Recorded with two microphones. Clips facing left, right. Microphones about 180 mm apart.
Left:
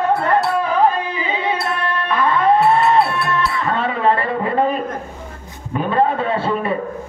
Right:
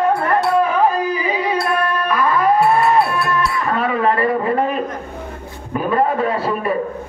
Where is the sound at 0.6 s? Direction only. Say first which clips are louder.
Even; 30° left (ahead or behind).